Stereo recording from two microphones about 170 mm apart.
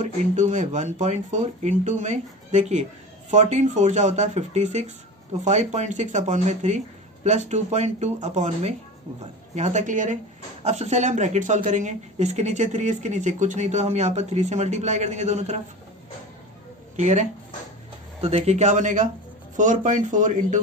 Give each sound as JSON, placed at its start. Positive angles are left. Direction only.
{"t": 0.0, "sound": "speech", "side_deg": -45}
{"t": 16.9, "sound": "speech", "side_deg": -45}